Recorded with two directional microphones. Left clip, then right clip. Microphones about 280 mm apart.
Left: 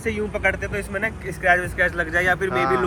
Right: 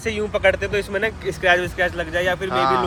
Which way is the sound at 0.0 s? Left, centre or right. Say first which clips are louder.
Right 4 dB; right.